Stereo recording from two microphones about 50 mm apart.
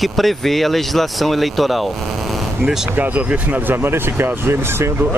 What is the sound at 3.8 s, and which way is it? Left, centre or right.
Speech, right.